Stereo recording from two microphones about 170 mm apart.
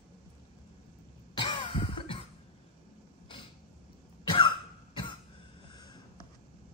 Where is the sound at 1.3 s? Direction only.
30° left (ahead or behind).